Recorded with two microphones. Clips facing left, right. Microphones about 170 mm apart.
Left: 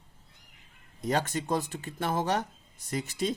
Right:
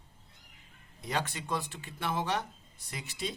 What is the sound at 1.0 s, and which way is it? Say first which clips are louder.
Speech: left 6 dB; 45° left (ahead or behind).